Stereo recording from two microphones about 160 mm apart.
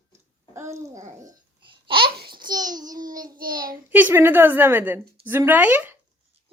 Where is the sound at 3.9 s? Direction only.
15° right (ahead or behind).